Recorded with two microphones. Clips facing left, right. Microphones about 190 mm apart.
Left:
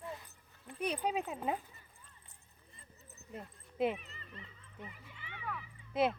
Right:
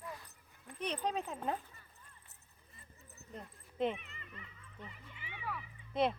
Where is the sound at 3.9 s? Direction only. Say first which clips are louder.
Left 1 dB; 35° left (ahead or behind).